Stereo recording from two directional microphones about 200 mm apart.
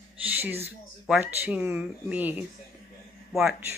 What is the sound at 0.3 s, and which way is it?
Speech, 10° right (ahead or behind).